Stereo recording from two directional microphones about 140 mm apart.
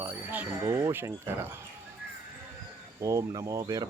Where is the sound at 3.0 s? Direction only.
25° right (ahead or behind).